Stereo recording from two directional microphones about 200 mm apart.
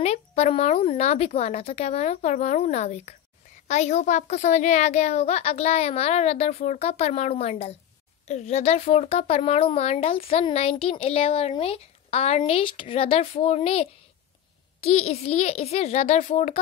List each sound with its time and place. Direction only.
0.0 s a child's voice: 35° left (ahead or behind)